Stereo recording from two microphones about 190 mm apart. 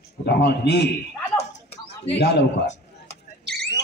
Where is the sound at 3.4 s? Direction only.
55° right (ahead or behind).